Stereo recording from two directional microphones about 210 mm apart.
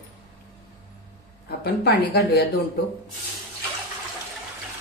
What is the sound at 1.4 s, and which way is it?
Speech, 50° left (ahead or behind).